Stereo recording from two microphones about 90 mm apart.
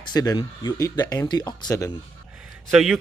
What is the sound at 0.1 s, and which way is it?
Speech, 45° left (ahead or behind).